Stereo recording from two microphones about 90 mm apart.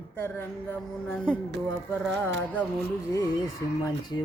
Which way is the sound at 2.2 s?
15° left (ahead or behind).